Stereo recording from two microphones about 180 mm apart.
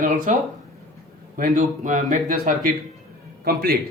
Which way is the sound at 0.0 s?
45° right (ahead or behind).